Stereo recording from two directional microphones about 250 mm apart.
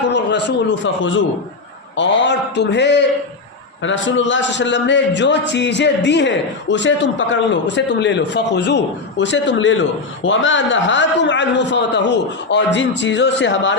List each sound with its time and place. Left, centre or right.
0.1 s a man's voice: left